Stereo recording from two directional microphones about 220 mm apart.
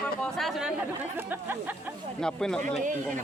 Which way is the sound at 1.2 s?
10° right (ahead or behind).